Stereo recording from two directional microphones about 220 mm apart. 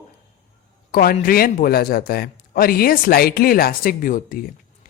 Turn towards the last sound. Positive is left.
turn(degrees=40)  # may be behind; listen again after turning